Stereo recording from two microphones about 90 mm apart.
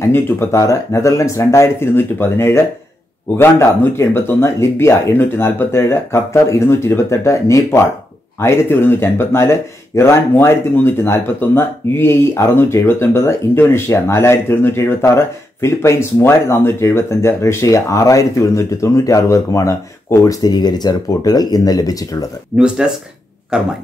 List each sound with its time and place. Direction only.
0.1 s speech: 30° left (ahead or behind)
22.8 s speech: 10° right (ahead or behind)